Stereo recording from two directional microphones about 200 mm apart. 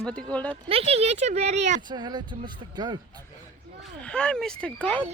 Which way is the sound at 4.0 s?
5° left (ahead or behind).